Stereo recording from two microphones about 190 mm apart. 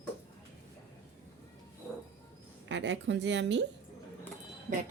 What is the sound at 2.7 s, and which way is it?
Speech, 70° right (ahead or behind).